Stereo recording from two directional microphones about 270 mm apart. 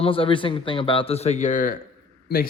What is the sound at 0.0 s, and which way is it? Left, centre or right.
Speech, centre.